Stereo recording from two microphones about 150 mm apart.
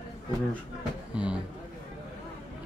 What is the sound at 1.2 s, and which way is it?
Speech, 10° right (ahead or behind).